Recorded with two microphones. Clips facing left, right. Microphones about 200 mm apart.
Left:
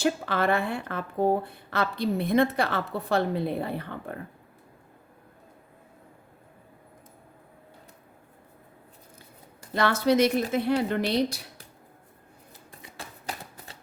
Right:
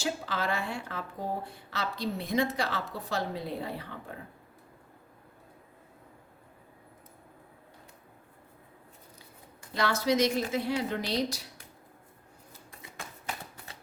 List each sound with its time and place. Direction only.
0.0 s speech: 60° left (ahead or behind)
9.7 s speech: 55° left (ahead or behind)